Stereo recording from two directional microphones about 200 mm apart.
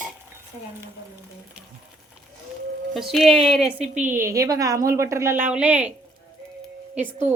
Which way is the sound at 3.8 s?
35° right (ahead or behind).